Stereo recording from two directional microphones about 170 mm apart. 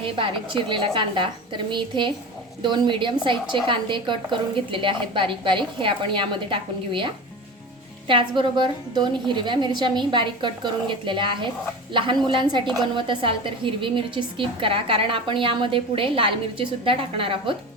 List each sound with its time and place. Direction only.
0.0 s a woman's voice: 30° right (ahead or behind)